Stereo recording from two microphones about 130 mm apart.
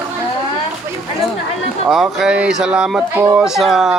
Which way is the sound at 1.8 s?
Centre (ahead or behind).